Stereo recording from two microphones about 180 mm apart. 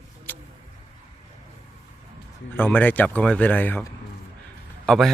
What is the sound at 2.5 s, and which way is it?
A man's voice, 10° left (ahead or behind).